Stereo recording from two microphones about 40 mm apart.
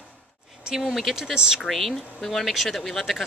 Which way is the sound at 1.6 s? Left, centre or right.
Centre.